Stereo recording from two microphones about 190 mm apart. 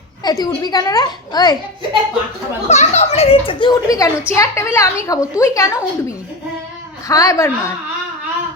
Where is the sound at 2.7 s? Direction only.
35° left (ahead or behind); by 7.7 s 15° left (ahead or behind).